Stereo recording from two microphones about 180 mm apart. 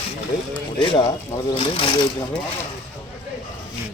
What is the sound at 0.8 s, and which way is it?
Speech, 25° left (ahead or behind).